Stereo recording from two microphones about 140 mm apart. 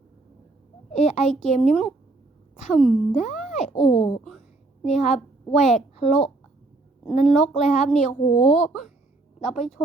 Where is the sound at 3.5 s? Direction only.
55° left (ahead or behind).